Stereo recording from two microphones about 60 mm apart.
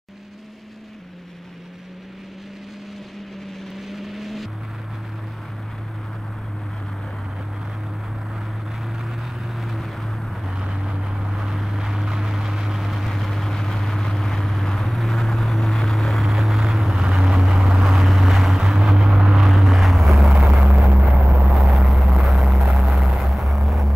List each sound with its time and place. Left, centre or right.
3.7 s vehicle: centre
9.6 s vehicle: centre
10.5 s vehicle: centre
21.4 s vehicle: centre